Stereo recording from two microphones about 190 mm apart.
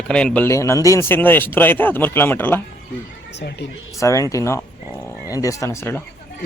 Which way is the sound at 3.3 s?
60° left (ahead or behind).